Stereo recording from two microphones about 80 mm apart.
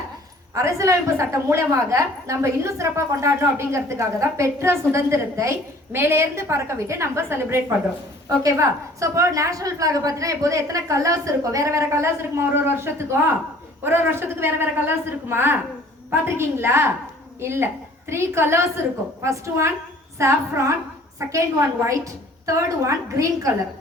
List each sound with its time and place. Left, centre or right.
0.5 s a woman's voice: right